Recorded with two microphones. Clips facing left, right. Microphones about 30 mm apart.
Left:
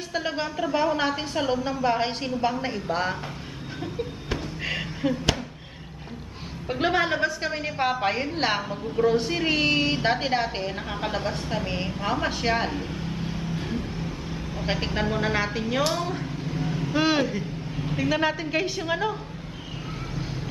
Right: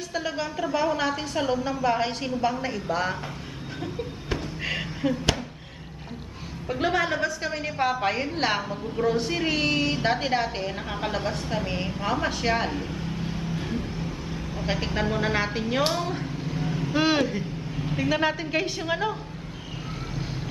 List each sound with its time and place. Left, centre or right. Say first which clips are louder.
0.1 s a woman's voice: left 2 dB; centre
0.5 s a woman's voice: left 1 dB; centre
4.3 s a sound: right 2 dB; centre
6.7 s a woman's voice: left 1 dB; centre